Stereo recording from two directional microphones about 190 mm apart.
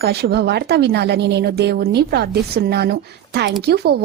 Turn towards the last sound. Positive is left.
turn(degrees=-55)  # may be behind; listen again after turning